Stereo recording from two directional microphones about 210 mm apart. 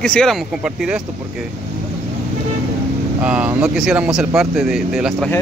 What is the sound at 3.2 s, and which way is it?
Speech, 5° right (ahead or behind).